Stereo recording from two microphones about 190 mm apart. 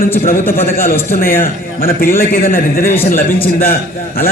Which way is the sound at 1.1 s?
50° left (ahead or behind).